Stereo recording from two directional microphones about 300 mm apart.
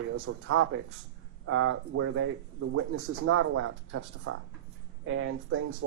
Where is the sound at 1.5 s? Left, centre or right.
Right.